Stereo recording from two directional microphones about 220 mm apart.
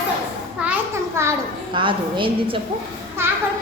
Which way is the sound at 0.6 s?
5° right (ahead or behind).